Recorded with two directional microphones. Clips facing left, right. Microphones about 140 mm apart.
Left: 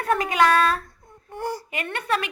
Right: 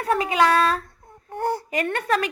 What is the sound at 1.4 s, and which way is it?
Speech, 55° right (ahead or behind).